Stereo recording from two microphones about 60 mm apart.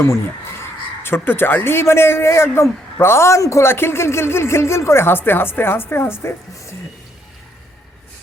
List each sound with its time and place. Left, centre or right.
1.0 s speech: left